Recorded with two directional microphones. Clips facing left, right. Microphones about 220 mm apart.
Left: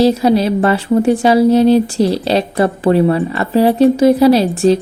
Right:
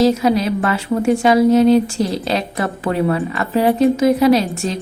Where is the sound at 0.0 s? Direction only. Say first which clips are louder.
Left 3 dB; 30° left (ahead or behind).